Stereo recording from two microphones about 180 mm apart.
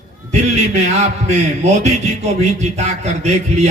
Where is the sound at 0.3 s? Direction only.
40° right (ahead or behind).